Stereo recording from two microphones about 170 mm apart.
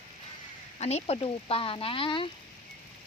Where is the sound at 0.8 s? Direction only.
40° left (ahead or behind).